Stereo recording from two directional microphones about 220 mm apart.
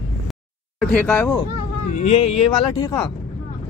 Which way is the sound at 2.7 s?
15° left (ahead or behind).